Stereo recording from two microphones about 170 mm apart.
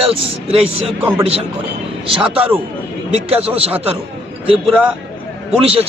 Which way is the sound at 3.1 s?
35° right (ahead or behind).